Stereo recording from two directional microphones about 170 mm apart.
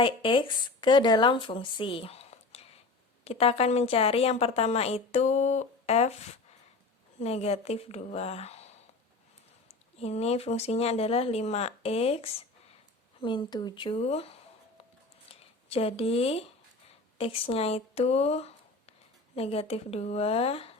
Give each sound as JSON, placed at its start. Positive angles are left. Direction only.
{"t": 0.0, "sound": "a woman's voice", "side_deg": 30}
{"t": 10.0, "sound": "a woman's voice", "side_deg": 40}
{"t": 13.2, "sound": "a woman's voice", "side_deg": 25}